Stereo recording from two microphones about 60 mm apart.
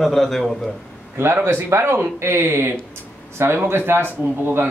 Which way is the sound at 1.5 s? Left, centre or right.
Right.